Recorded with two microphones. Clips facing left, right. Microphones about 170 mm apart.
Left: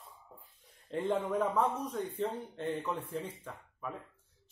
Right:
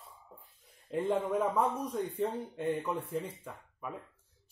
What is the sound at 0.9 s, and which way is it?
A man's voice, 5° right (ahead or behind).